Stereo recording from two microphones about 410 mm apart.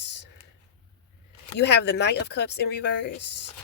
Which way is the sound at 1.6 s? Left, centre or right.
Left.